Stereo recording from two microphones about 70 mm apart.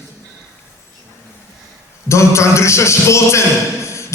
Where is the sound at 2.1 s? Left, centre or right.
Left.